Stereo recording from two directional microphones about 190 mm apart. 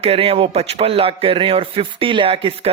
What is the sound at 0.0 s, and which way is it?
A man's voice, 30° right (ahead or behind).